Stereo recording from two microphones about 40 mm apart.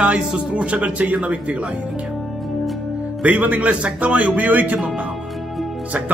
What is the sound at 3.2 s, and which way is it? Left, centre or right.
A man's voice, right.